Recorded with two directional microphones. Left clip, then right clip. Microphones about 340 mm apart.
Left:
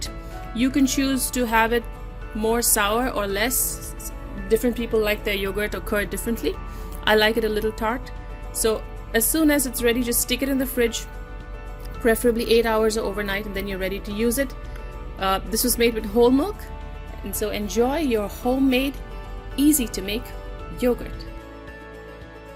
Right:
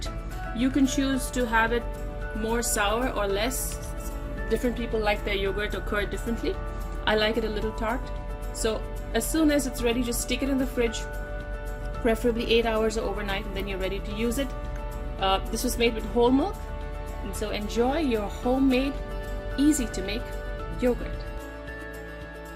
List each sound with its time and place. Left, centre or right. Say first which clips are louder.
0.6 s a woman's voice: left 4 dB; centre
12.0 s a woman's voice: left 5 dB; centre